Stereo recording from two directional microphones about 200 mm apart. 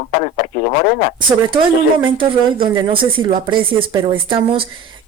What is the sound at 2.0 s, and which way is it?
Speech, 25° right (ahead or behind).